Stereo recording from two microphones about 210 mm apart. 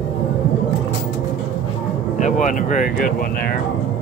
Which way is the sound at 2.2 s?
35° left (ahead or behind).